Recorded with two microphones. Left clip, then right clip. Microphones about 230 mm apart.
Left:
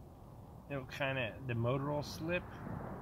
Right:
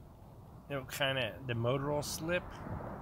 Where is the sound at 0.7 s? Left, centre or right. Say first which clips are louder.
Right 4 dB; centre.